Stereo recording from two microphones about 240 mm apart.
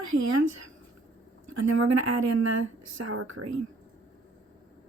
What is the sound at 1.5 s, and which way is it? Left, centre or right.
Speech, right.